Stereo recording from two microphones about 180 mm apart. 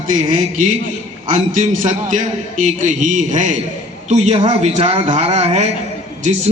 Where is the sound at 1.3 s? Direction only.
45° right (ahead or behind).